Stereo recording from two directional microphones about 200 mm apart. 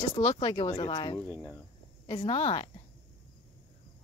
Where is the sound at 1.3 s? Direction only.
5° left (ahead or behind).